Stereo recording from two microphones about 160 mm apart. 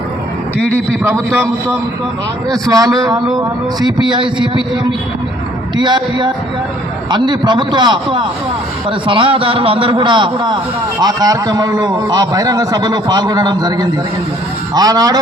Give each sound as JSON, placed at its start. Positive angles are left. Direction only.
{"t": 2.5, "sound": "a man's voice", "side_deg": -25}